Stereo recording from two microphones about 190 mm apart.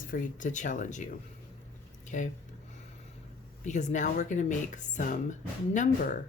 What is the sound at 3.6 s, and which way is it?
A woman's voice, 40° left (ahead or behind).